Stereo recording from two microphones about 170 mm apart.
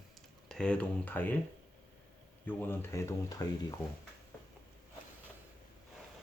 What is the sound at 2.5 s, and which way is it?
Speech, 15° left (ahead or behind).